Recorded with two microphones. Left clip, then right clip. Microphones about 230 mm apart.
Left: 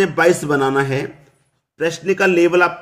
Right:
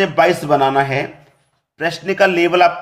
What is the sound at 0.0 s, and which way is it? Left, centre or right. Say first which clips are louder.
A man's voice: right 1 dB; left.